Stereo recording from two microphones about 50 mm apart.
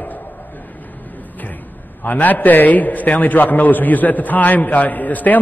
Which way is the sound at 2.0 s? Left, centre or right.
Left.